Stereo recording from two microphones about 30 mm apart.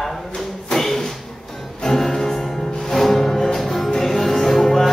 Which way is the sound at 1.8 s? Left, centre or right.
Centre.